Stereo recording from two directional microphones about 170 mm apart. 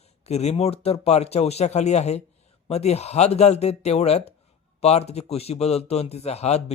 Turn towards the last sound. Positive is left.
turn(degrees=40)  # may be behind; listen again after turning